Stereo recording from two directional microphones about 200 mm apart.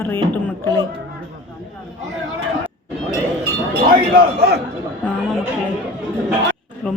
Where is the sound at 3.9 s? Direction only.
50° right (ahead or behind).